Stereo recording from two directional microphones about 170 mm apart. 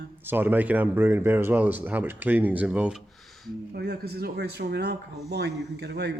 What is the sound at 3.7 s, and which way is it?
Speech, 70° right (ahead or behind).